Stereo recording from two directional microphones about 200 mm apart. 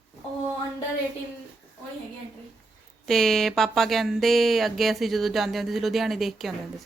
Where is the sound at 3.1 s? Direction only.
Centre (ahead or behind).